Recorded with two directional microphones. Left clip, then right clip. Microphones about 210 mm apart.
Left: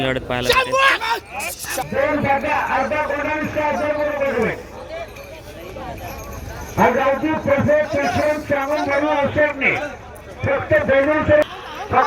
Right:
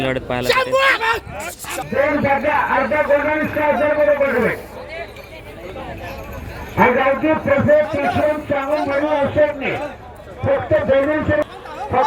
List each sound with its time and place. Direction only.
0.0 s speech: 5° right (ahead or behind)
0.4 s speech: 55° right (ahead or behind)
1.8 s a man's voice: 20° left (ahead or behind)
6.7 s a man's voice: 10° left (ahead or behind)
7.3 s a man's voice: centre (ahead or behind)
11.9 s speech: 50° left (ahead or behind)